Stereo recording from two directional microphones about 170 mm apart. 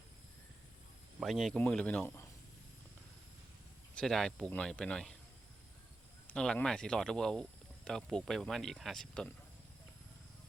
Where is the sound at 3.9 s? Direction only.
Centre (ahead or behind).